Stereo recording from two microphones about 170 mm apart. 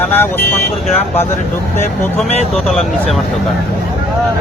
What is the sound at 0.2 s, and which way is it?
Speech, 10° left (ahead or behind).